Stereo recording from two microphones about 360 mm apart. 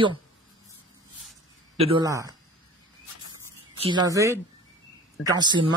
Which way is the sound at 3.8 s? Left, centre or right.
Centre.